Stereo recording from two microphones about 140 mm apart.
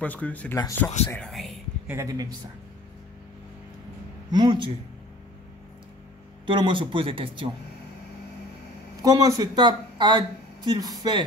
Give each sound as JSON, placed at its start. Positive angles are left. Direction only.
{"t": 0.0, "sound": "speech", "side_deg": 10}
{"t": 1.3, "sound": "speech", "side_deg": 0}
{"t": 2.0, "sound": "speech", "side_deg": -25}
{"t": 4.3, "sound": "speech", "side_deg": -35}
{"t": 6.4, "sound": "speech", "side_deg": -35}
{"t": 9.0, "sound": "speech", "side_deg": -25}